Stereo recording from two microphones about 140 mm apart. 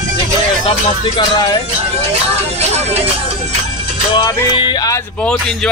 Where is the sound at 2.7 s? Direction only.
50° right (ahead or behind).